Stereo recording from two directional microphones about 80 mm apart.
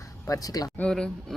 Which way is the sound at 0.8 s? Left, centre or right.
Centre.